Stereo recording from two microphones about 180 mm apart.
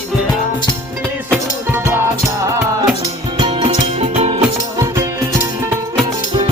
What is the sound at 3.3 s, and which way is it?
Music, 25° right (ahead or behind).